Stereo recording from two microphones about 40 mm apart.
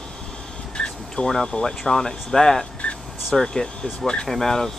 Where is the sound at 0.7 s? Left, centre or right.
Left.